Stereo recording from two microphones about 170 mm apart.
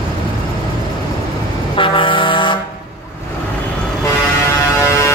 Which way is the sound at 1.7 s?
30° left (ahead or behind).